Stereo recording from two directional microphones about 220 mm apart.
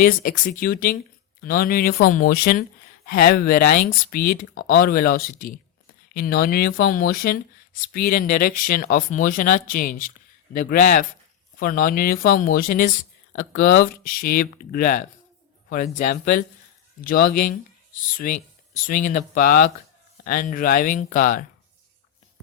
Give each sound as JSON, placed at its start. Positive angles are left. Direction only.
{"t": 0.0, "sound": "speech", "side_deg": 40}
{"t": 18.9, "sound": "speech", "side_deg": 35}